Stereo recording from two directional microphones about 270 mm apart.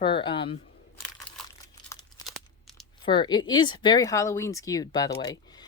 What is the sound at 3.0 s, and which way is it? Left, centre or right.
Speech, centre.